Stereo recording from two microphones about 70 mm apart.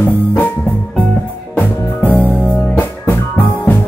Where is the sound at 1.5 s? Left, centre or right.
Left.